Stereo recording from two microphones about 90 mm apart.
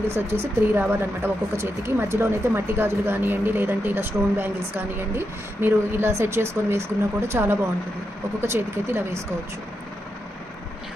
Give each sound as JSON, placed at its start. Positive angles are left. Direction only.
{"t": 0.1, "sound": "speech", "side_deg": -25}